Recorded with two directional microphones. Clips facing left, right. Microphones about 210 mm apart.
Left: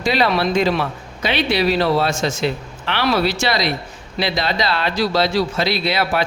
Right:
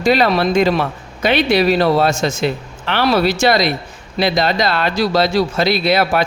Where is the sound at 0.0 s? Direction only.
45° right (ahead or behind).